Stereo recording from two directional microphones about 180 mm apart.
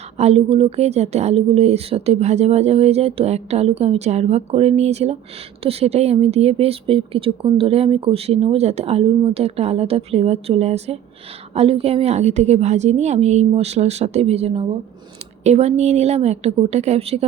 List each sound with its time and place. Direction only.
0.2 s speech: 35° right (ahead or behind)